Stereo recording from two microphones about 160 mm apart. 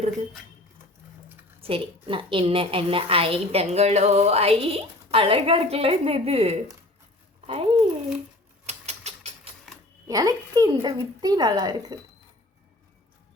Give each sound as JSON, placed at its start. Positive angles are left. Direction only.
{"t": 1.6, "sound": "a woman's voice", "side_deg": -35}
{"t": 8.6, "sound": "typewriter", "side_deg": -45}
{"t": 10.1, "sound": "speech", "side_deg": -25}